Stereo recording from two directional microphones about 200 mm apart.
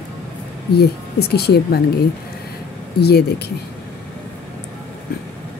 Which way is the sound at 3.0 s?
55° left (ahead or behind).